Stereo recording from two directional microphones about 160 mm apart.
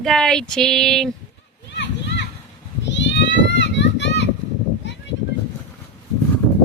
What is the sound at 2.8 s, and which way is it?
Children playing, 90° left.